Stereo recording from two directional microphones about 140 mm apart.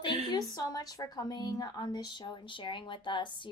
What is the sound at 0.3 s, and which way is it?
A woman's voice, 25° left (ahead or behind).